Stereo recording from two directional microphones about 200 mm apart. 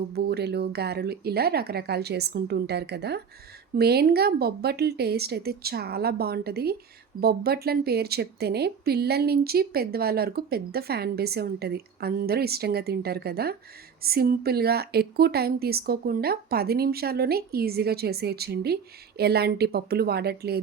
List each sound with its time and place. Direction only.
0.1 s speech: 55° right (ahead or behind)